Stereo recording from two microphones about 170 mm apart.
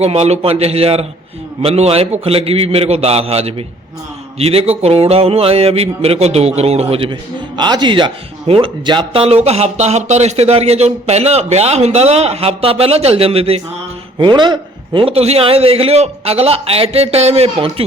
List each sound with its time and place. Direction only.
0.0 s speech: 40° right (ahead or behind)